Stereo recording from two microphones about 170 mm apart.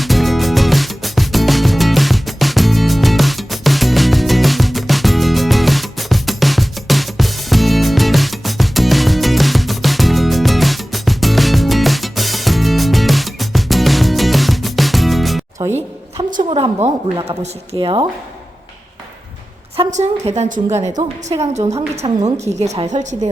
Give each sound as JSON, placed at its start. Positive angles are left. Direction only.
{"t": 0.0, "sound": "music", "side_deg": 0}
{"t": 15.5, "sound": "music", "side_deg": -20}
{"t": 16.5, "sound": "a woman's voice", "side_deg": -35}
{"t": 19.7, "sound": "a woman's voice", "side_deg": -40}
{"t": 20.7, "sound": "speech", "side_deg": -15}
{"t": 21.3, "sound": "a woman's voice", "side_deg": -30}